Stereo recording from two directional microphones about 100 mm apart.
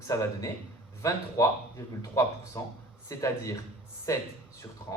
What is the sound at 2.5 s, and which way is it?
Speech, 30° left (ahead or behind).